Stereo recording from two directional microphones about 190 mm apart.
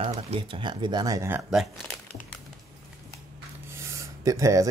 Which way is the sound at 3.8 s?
15° right (ahead or behind).